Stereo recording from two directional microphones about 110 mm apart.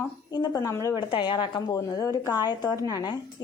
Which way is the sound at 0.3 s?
40° left (ahead or behind).